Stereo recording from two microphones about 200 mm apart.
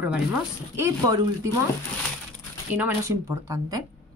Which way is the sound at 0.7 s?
15° right (ahead or behind).